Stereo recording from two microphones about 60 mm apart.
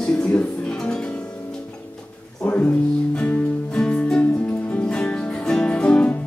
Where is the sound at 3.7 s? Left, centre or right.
Centre.